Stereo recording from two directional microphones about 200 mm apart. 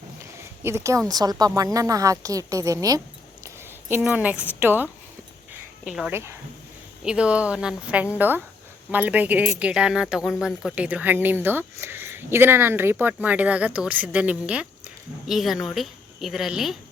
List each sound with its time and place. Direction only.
0.2 s a woman's voice: 15° right (ahead or behind)